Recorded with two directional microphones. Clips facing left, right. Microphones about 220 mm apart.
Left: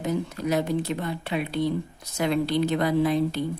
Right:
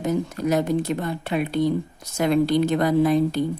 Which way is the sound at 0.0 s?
45° right (ahead or behind).